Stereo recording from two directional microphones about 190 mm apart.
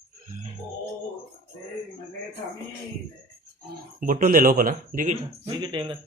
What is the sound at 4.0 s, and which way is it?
Speech, 45° right (ahead or behind).